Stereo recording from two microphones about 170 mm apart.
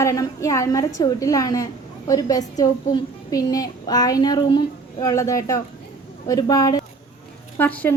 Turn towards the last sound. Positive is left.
turn(degrees=10)  # may be behind; listen again after turning